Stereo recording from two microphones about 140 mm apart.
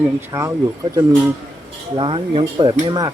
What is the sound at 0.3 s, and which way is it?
Speech, 20° right (ahead or behind).